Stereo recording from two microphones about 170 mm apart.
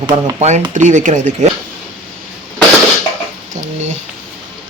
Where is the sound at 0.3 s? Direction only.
40° right (ahead or behind).